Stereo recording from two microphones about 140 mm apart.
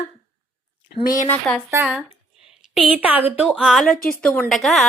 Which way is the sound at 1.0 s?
70° left (ahead or behind).